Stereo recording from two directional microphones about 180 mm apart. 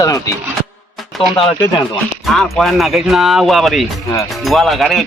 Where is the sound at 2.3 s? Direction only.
Centre (ahead or behind).